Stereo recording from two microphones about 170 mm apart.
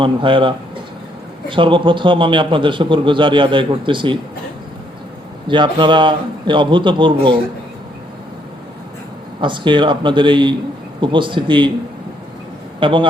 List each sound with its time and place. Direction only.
0.0 s a man's voice: 30° right (ahead or behind)
5.5 s a man's voice: 30° right (ahead or behind)
9.4 s a man's voice: 30° right (ahead or behind)
12.8 s a man's voice: 30° right (ahead or behind)